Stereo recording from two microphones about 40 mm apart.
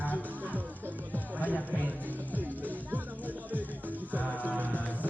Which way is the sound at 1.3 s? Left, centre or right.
Left.